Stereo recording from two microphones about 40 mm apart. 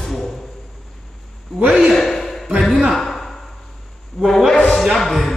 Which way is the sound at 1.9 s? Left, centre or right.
Centre.